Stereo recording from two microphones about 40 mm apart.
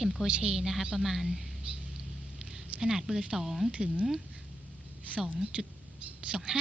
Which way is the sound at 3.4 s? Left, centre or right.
Centre.